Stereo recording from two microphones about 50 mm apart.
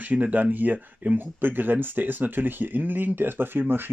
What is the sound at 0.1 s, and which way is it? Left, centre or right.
Speech, right.